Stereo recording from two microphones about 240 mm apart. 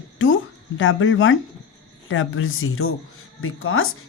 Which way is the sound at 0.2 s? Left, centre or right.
Left.